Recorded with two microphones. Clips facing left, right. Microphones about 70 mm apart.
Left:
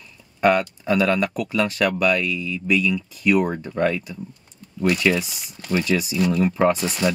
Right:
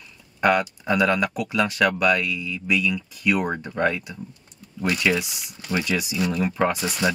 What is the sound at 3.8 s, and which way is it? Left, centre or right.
Speech, right.